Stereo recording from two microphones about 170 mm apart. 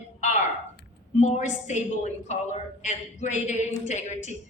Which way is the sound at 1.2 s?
40° left (ahead or behind).